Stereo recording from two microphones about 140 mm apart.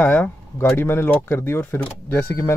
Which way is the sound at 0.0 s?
10° left (ahead or behind).